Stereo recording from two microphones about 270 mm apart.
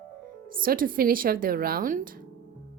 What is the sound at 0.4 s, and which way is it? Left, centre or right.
Speech, right.